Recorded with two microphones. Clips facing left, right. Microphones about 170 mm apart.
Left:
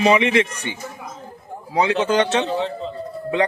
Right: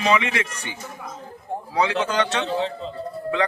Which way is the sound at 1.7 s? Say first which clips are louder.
Left 4 dB; 20° left (ahead or behind).